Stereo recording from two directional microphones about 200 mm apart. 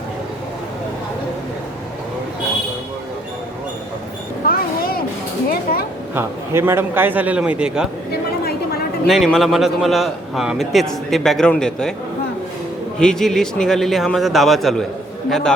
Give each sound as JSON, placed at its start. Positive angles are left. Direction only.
{"t": 4.4, "sound": "a sound", "side_deg": 45}
{"t": 6.1, "sound": "a man's voice", "side_deg": -10}
{"t": 8.1, "sound": "chatter", "side_deg": 50}
{"t": 9.0, "sound": "a man's voice", "side_deg": 0}
{"t": 13.0, "sound": "a man's voice", "side_deg": 5}